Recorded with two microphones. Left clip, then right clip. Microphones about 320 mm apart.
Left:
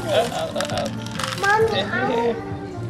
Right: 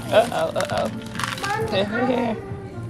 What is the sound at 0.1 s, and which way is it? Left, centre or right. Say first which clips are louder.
A child's voice: right 3 dB; centre.